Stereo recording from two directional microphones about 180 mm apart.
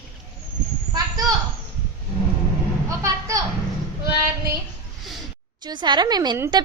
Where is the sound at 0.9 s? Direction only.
20° right (ahead or behind).